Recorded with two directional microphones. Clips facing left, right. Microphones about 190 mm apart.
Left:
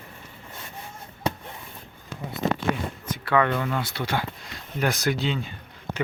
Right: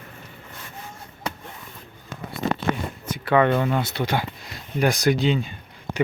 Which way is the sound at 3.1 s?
20° right (ahead or behind).